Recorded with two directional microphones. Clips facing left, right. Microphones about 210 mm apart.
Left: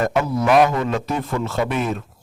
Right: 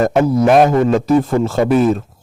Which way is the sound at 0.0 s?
40° right (ahead or behind).